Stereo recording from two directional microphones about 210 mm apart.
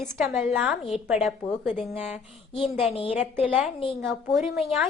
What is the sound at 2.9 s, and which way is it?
Speech, 25° left (ahead or behind).